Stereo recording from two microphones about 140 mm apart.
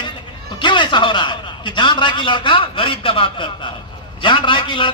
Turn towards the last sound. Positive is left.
turn(degrees=35)  # may be behind; listen again after turning